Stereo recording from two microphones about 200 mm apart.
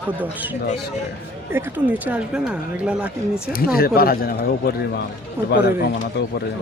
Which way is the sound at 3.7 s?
50° left (ahead or behind).